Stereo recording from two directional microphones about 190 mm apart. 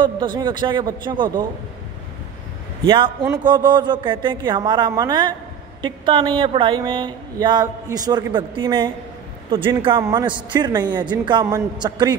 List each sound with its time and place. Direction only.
0.4 s speech: 25° right (ahead or behind)
2.9 s speech: 25° right (ahead or behind)